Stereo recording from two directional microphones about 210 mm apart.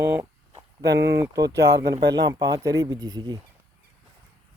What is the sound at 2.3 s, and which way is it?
Speech, 20° right (ahead or behind).